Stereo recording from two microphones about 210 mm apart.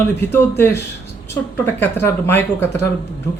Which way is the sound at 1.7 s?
10° left (ahead or behind).